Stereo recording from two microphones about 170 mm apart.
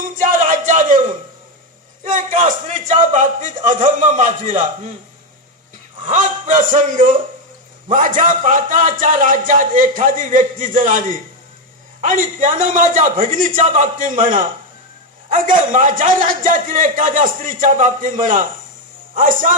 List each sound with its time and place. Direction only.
0.2 s a sound: 50° right (ahead or behind)
2.0 s a man's voice: 50° right (ahead or behind)
6.1 s a man's voice: 50° right (ahead or behind)